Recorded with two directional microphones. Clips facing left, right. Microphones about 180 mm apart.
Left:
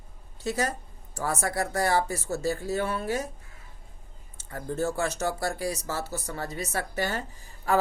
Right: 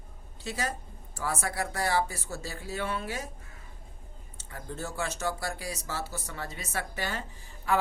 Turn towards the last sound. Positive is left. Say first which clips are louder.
# left 3 dB
turn(degrees=40)  # may be behind; listen again after turning